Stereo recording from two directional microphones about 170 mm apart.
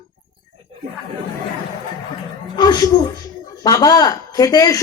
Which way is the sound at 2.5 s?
25° left (ahead or behind).